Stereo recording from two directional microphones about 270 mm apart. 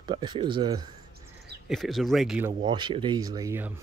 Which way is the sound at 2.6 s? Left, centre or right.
Centre.